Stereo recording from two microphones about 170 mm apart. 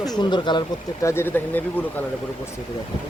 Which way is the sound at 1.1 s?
15° left (ahead or behind).